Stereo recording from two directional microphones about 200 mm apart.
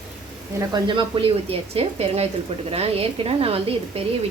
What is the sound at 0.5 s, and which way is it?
Speech, 25° right (ahead or behind).